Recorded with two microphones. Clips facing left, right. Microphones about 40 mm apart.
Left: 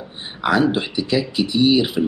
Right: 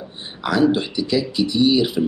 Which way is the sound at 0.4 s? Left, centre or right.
Centre.